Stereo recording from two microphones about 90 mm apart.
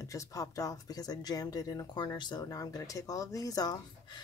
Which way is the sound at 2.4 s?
45° left (ahead or behind).